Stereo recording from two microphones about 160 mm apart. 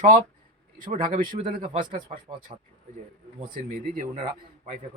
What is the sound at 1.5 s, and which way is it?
Speech, 40° right (ahead or behind).